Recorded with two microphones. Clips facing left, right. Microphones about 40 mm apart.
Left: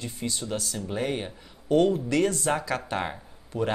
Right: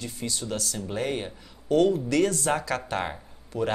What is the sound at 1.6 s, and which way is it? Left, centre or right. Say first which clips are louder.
Speech: even; left.